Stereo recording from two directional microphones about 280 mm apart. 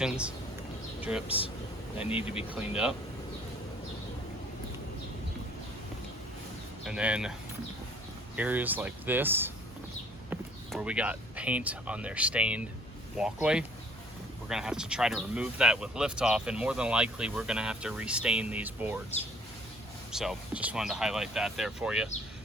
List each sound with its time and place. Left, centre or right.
0.0 s speech: centre
2.0 s speech: centre
2.5 s speech: centre
6.8 s speech: centre
8.4 s speech: centre
20.1 s speech: centre